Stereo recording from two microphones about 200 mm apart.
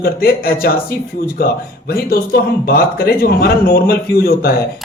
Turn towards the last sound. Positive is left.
turn(degrees=50)  # may be behind; listen again after turning